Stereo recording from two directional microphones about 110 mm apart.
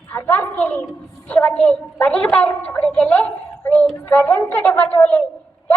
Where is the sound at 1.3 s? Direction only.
15° left (ahead or behind).